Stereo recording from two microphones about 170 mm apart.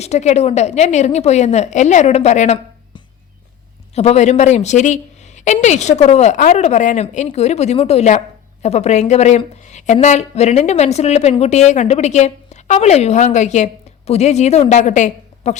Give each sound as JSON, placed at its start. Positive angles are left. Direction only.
{"t": 0.0, "sound": "a woman's voice", "side_deg": 40}
{"t": 3.9, "sound": "a woman's voice", "side_deg": 40}